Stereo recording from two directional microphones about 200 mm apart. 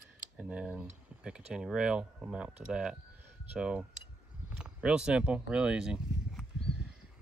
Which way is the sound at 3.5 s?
5° right (ahead or behind).